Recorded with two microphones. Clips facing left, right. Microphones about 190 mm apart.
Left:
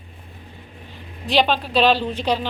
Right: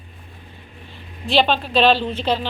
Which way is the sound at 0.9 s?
15° left (ahead or behind).